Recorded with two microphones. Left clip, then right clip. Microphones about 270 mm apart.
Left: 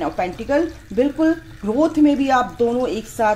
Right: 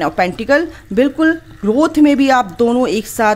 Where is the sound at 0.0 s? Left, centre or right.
Right.